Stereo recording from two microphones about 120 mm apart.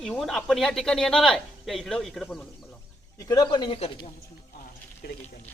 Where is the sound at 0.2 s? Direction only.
Centre (ahead or behind).